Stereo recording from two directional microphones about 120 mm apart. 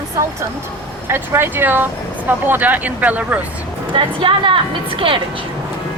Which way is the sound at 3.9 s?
45° right (ahead or behind).